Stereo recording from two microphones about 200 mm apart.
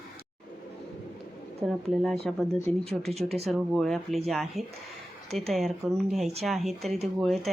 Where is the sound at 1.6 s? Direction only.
Centre (ahead or behind).